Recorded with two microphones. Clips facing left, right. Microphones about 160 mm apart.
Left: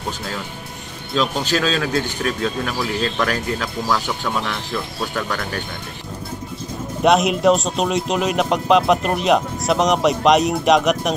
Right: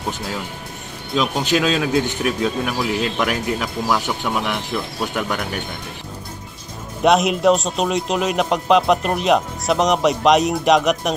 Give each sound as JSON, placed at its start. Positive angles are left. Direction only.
{"t": 1.1, "sound": "speech", "side_deg": -15}
{"t": 7.0, "sound": "a man's voice", "side_deg": 0}